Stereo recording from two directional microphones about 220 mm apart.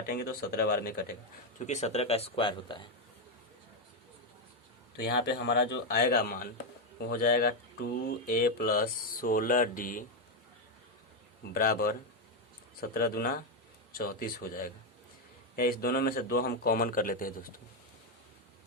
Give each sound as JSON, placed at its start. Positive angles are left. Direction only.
{"t": 0.1, "sound": "speech", "side_deg": 45}
{"t": 1.5, "sound": "speech", "side_deg": 30}
{"t": 4.9, "sound": "a man's voice", "side_deg": 50}
{"t": 11.5, "sound": "a man's voice", "side_deg": 40}